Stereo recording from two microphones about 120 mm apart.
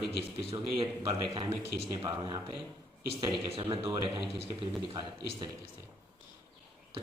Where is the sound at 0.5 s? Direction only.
45° right (ahead or behind).